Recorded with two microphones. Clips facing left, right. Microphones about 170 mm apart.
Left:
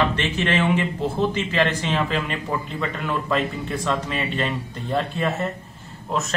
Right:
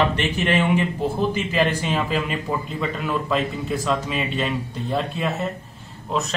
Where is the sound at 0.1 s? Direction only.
15° right (ahead or behind).